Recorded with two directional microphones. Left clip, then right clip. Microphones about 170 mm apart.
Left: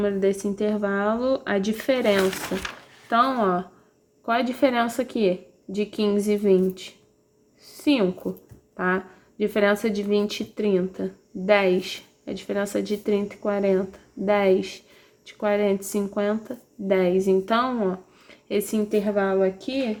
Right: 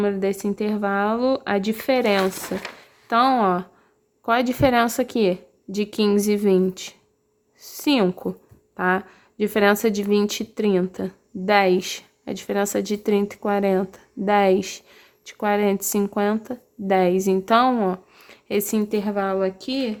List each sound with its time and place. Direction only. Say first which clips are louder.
0.0 s speech: even; 35° right (ahead or behind)